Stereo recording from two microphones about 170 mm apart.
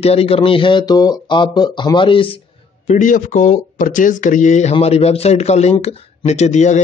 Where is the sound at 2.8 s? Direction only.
50° left (ahead or behind).